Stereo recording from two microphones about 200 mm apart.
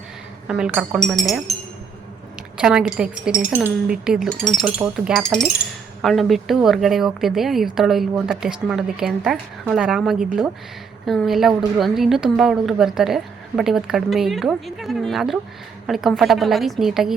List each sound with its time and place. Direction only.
0.4 s speech: 5° right (ahead or behind)
2.6 s speech: 5° right (ahead or behind)